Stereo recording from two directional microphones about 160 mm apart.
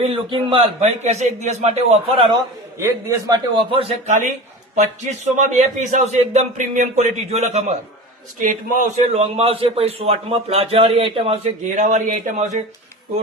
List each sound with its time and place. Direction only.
0.0 s a man's voice: 35° right (ahead or behind)
2.7 s a man's voice: 20° right (ahead or behind); by 4.1 s 35° right (ahead or behind)
4.7 s a man's voice: 50° right (ahead or behind)
8.4 s a man's voice: 55° right (ahead or behind)